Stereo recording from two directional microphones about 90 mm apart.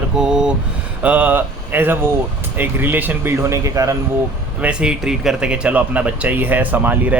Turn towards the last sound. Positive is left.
turn(degrees=-20)  # may be behind; listen again after turning